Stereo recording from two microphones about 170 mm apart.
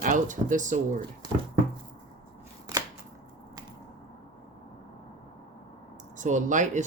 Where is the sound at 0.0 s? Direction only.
50° right (ahead or behind).